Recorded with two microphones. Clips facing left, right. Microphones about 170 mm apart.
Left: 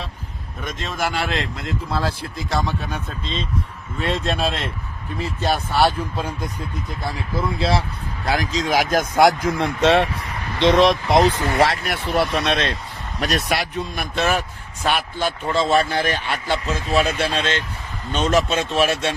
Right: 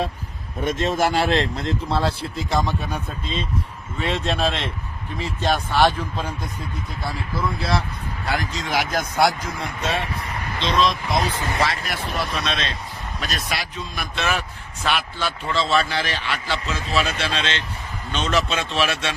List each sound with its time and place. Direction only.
0.8 s speech: centre (ahead or behind)
1.1 s speech: 35° right (ahead or behind)
2.5 s speech: 15° right (ahead or behind)
3.9 s speech: centre (ahead or behind)
7.3 s speech: 25° left (ahead or behind)
8.6 s speech: 40° left (ahead or behind)
9.5 s speech: 80° left
11.3 s speech: 20° left (ahead or behind)
11.6 s speech: 65° left (ahead or behind); by 19.1 s 45° left (ahead or behind)